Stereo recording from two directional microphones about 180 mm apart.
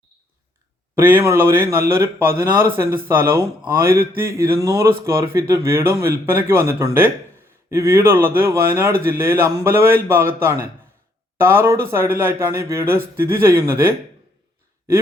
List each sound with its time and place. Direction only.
0.9 s a man's voice: 10° right (ahead or behind)
3.6 s mantra: 20° right (ahead or behind)
4.5 s a man's voice: 15° right (ahead or behind)